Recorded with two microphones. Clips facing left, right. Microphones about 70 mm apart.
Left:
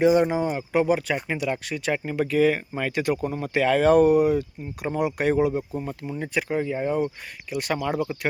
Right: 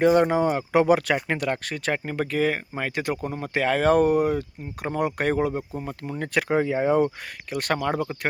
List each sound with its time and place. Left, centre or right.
0.0 s speech: right
7.5 s speech: right
8.0 s speech: right